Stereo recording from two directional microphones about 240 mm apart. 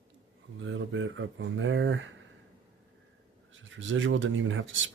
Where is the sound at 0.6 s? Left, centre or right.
Right.